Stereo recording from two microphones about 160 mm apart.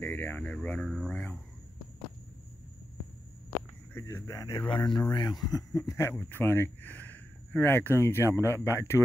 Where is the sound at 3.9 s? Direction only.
20° left (ahead or behind).